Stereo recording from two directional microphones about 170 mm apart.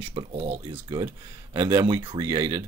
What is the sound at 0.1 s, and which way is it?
Speech, 35° right (ahead or behind).